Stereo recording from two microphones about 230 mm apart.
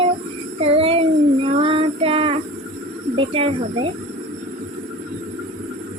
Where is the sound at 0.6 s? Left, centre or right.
Right.